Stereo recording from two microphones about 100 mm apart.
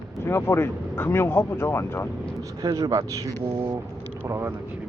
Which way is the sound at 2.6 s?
40° right (ahead or behind).